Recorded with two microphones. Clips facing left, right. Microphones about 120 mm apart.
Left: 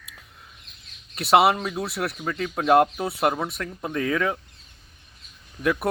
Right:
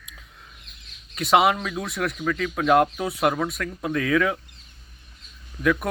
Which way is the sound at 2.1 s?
20° left (ahead or behind).